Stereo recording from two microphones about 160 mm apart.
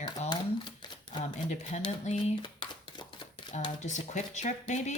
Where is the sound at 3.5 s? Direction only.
45° left (ahead or behind).